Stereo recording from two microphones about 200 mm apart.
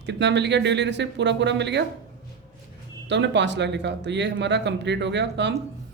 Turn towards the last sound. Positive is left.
turn(degrees=-60)  # may be behind; listen again after turning